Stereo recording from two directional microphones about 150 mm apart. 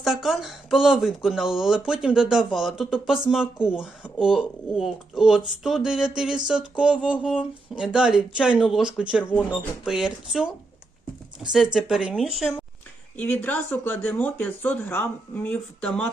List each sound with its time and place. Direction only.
0.0 s speech: centre (ahead or behind)
11.5 s speech: 5° right (ahead or behind)
13.1 s speech: 10° left (ahead or behind)